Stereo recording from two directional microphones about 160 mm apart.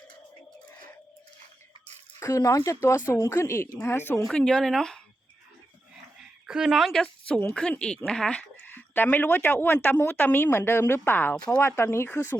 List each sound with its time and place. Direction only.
2.1 s a woman's voice: 20° left (ahead or behind); by 4.9 s 5° left (ahead or behind)
6.1 s a woman's voice: 5° right (ahead or behind); by 12.4 s 15° left (ahead or behind)